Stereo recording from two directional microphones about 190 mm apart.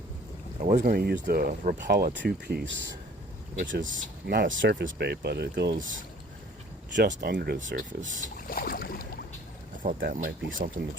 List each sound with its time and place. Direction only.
0.6 s speech: 40° right (ahead or behind); by 3.8 s 75° right (ahead or behind)
3.8 s speech: 45° right (ahead or behind); by 6.0 s 75° right (ahead or behind)
6.9 s speech: 50° right (ahead or behind)
8.4 s boat: 50° left (ahead or behind)
9.8 s speech: 45° right (ahead or behind)